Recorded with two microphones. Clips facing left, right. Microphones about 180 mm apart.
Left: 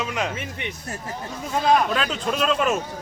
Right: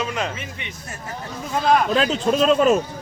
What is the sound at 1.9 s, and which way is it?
Speech, 35° right (ahead or behind).